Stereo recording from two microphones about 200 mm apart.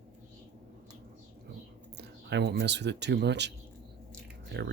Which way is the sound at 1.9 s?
55° right (ahead or behind).